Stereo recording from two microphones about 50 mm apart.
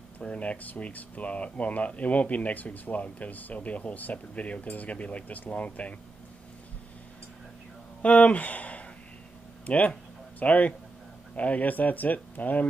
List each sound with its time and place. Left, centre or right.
0.2 s speech: left
8.0 s speech: left